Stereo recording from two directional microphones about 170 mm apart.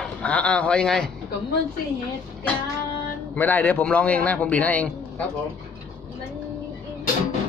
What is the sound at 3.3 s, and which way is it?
Speech, 10° left (ahead or behind).